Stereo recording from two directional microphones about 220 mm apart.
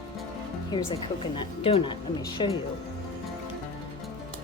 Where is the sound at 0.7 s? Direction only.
20° left (ahead or behind).